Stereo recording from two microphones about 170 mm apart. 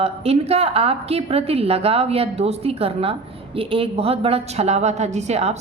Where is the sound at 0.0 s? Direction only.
35° right (ahead or behind).